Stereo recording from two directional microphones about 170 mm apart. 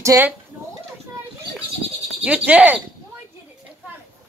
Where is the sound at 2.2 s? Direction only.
10° right (ahead or behind).